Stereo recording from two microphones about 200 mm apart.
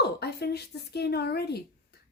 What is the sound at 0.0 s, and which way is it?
Speech, 55° left (ahead or behind).